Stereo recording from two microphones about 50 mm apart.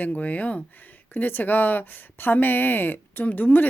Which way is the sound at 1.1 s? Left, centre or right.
Left.